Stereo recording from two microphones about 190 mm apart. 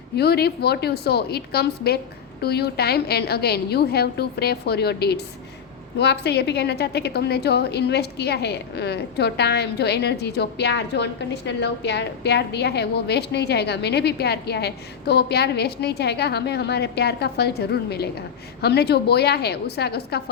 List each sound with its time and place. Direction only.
0.2 s a woman's voice: 60° left (ahead or behind)